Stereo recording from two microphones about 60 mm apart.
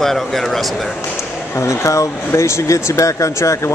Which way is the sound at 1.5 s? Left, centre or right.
Left.